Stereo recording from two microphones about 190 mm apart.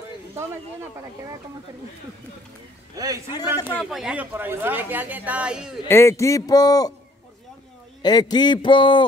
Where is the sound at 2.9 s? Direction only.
20° right (ahead or behind).